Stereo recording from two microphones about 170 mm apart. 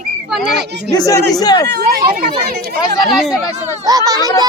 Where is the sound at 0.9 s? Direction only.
20° left (ahead or behind).